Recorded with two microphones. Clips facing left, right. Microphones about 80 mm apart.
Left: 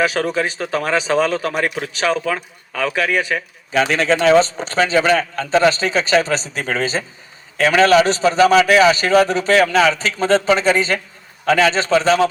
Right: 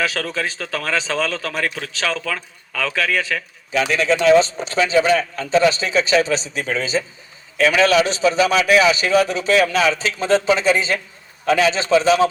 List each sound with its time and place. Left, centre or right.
0.0 s speech: left
3.7 s a man's voice: left